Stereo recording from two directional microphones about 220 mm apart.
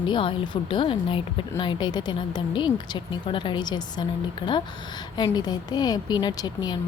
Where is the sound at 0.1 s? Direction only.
20° left (ahead or behind).